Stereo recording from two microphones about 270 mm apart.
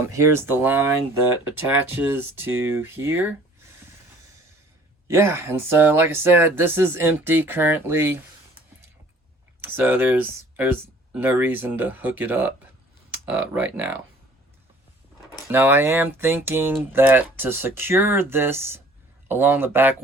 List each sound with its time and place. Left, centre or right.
0.0 s speech: centre
5.0 s speech: centre
9.6 s speech: centre
15.4 s speech: centre